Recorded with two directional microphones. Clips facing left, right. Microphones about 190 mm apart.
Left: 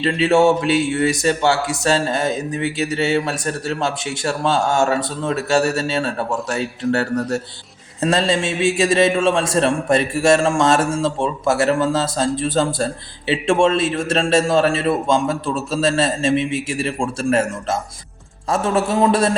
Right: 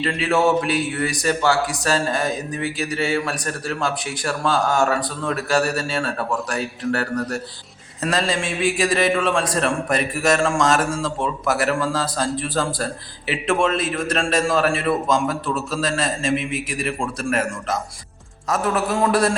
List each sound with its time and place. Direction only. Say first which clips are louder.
0.0 s a man's voice: left 5 dB; 25° left (ahead or behind)